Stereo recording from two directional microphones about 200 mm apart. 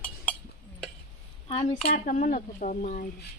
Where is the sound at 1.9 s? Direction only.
40° left (ahead or behind).